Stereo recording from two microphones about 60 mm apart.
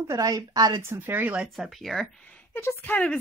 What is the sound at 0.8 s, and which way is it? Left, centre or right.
Speech, right.